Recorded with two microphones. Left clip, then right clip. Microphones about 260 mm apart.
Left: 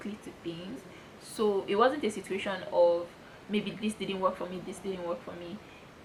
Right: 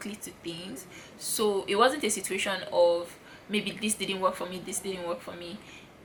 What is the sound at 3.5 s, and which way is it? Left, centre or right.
Speech, centre.